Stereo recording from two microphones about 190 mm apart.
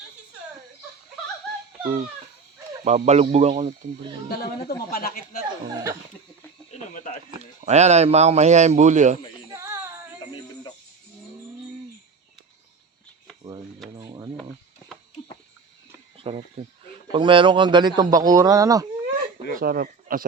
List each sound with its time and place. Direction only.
1.8 s speech: 40° right (ahead or behind)
4.3 s speech: 55° left (ahead or behind)
5.7 s speech: 20° right (ahead or behind)
6.7 s speech: 40° left (ahead or behind)
7.6 s speech: 35° right (ahead or behind)
9.5 s a sound: 15° right (ahead or behind)
10.2 s a sound: 25° left (ahead or behind)
13.9 s a sound: 20° right (ahead or behind)
16.1 s cricket: 30° right (ahead or behind)
17.1 s a man's voice: 25° right (ahead or behind)
19.5 s speech: 50° right (ahead or behind)